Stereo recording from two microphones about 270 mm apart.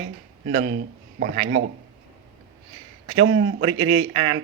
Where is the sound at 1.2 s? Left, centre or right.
Right.